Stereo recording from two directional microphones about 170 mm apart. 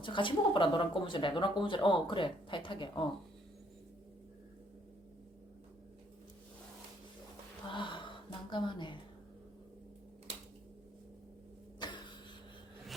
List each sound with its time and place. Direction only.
0.0 s speech: 30° left (ahead or behind)
7.7 s speech: 30° left (ahead or behind)
11.8 s a sound: 25° left (ahead or behind)